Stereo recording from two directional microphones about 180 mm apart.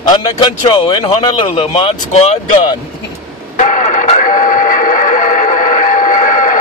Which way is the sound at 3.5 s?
45° left (ahead or behind).